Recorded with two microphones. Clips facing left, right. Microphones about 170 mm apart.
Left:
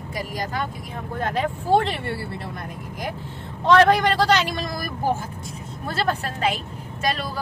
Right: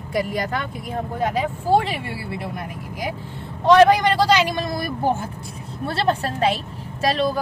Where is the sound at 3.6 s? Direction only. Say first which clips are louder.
Right 3 dB; 15° right (ahead or behind).